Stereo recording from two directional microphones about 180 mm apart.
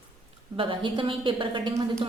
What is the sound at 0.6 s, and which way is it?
A woman's voice, 30° right (ahead or behind).